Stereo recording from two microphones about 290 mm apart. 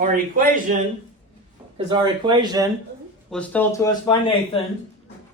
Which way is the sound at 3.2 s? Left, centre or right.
Centre.